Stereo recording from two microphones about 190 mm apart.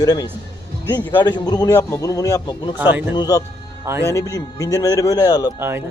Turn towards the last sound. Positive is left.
turn(degrees=-10)  # may be behind; listen again after turning